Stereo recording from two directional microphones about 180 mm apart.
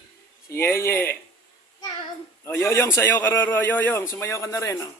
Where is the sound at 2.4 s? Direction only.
15° left (ahead or behind).